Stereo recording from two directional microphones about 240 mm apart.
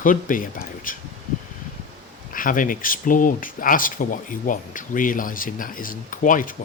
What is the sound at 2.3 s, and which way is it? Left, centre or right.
Speech, left.